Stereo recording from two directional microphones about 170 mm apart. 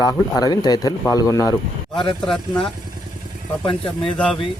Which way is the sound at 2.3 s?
5° left (ahead or behind).